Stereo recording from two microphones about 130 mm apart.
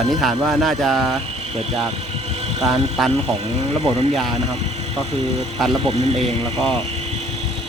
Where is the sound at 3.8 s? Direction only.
55° right (ahead or behind).